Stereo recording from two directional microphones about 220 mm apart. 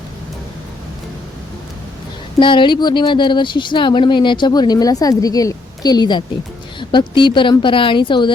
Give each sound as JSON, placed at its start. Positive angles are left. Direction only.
{"t": 2.4, "sound": "speech", "side_deg": 20}